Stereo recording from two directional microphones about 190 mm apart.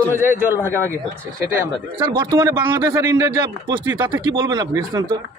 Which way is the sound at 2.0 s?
20° right (ahead or behind).